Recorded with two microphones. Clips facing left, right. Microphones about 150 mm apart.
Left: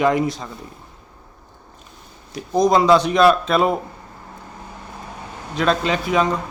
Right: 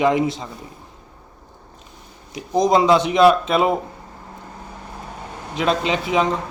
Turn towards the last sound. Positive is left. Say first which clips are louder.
# even
turn(degrees=-20)  # may be behind; listen again after turning